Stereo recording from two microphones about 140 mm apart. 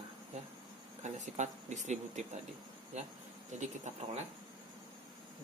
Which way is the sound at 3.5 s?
60° right (ahead or behind).